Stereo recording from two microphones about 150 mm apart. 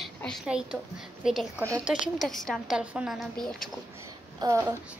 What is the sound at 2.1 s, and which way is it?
A woman's voice, centre (ahead or behind).